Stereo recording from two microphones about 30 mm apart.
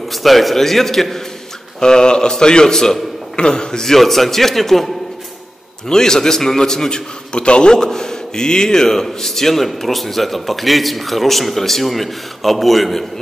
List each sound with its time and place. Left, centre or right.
0.1 s a man's voice: centre
1.8 s a man's voice: left
3.3 s a man's voice: left
3.8 s a man's voice: centre
5.9 s a man's voice: left
7.3 s a man's voice: left
8.9 s a man's voice: centre